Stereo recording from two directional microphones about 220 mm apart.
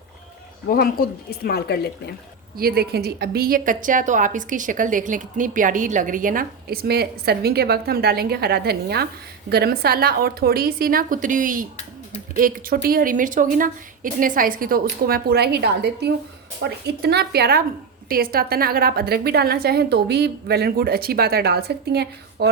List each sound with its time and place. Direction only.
0.7 s speech: 45° left (ahead or behind)
2.6 s a woman's voice: 45° right (ahead or behind)